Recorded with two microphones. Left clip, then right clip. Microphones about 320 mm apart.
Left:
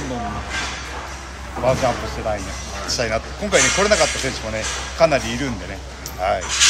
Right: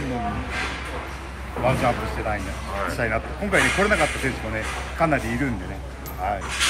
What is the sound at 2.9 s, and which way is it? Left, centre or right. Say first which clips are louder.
Speech: left 8 dB; centre.